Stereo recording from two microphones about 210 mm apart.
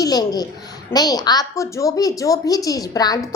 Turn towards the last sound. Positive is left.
turn(degrees=20)  # may be behind; listen again after turning